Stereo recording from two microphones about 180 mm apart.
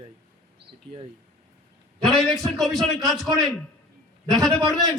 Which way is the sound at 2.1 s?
Centre (ahead or behind).